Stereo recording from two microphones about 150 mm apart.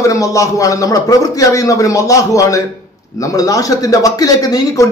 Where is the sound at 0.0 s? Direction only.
20° left (ahead or behind).